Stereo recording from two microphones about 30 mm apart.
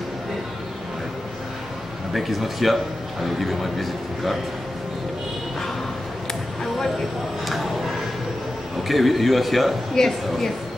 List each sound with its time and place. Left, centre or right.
2.1 s speech: centre
7.4 s speech: centre
8.8 s speech: centre
10.0 s speech: centre